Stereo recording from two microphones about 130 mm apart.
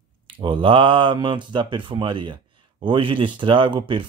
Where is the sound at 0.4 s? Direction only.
40° right (ahead or behind).